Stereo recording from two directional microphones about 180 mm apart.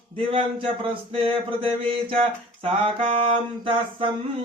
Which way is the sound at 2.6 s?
30° right (ahead or behind).